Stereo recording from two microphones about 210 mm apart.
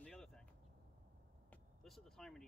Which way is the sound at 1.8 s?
Centre (ahead or behind).